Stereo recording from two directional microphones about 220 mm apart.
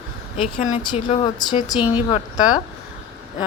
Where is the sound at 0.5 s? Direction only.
35° left (ahead or behind).